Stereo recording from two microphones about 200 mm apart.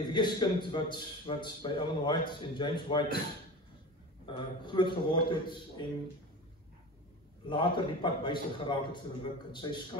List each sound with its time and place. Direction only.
0.1 s a man's voice: 20° left (ahead or behind)
4.3 s a man's voice: 25° left (ahead or behind)
7.4 s a man's voice: 25° left (ahead or behind)